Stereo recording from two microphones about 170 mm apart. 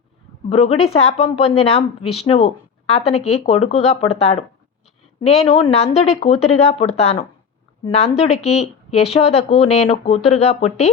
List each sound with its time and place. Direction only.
0.5 s speech: 35° left (ahead or behind)